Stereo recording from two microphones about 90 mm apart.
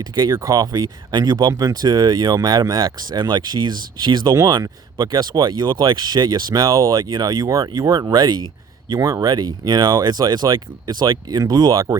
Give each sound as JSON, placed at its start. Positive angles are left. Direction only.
{"t": 0.0, "sound": "speech", "side_deg": -55}
{"t": 0.3, "sound": "speech", "side_deg": -45}
{"t": 9.0, "sound": "speech", "side_deg": -35}
{"t": 9.2, "sound": "speech", "side_deg": -50}